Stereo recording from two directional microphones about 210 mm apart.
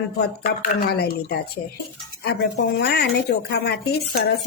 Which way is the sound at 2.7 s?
50° left (ahead or behind).